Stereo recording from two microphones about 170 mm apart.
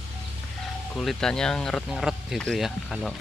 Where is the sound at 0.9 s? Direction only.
Centre (ahead or behind).